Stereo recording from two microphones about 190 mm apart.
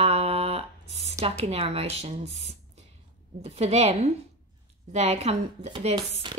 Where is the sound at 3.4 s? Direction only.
35° right (ahead or behind).